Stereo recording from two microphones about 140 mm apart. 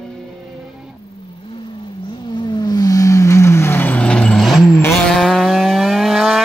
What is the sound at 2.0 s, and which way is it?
Vehicle, 35° left (ahead or behind).